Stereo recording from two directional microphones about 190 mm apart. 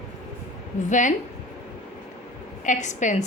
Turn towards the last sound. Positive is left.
turn(degrees=40)  # may be behind; listen again after turning